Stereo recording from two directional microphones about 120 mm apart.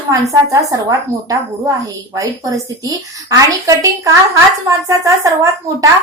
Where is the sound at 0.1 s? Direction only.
30° right (ahead or behind).